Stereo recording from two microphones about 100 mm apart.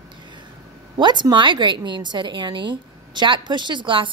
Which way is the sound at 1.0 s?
50° right (ahead or behind).